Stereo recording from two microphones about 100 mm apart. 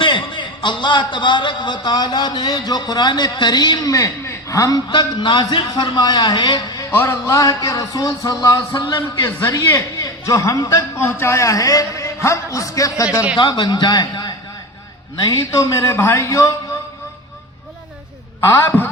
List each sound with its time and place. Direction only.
0.0 s a man's voice: 55° left (ahead or behind); by 4.8 s 35° left (ahead or behind)
4.9 s a man's voice: 55° left (ahead or behind)
6.9 s speech: 25° left (ahead or behind)
8.7 s a man's voice: 50° left (ahead or behind)
9.7 s a man's voice: 35° left (ahead or behind)
13.3 s a man's voice: 50° left (ahead or behind)
15.2 s speech: 35° left (ahead or behind)
18.3 s a man's voice: 25° left (ahead or behind)